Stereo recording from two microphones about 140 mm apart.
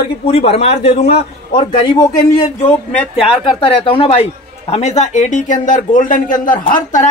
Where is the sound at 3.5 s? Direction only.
40° left (ahead or behind); by 7.1 s 65° left (ahead or behind).